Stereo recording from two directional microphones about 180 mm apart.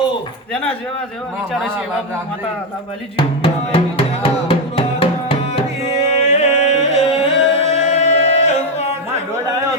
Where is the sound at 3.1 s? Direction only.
30° left (ahead or behind).